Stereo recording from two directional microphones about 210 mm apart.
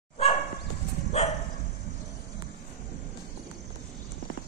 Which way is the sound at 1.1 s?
30° left (ahead or behind).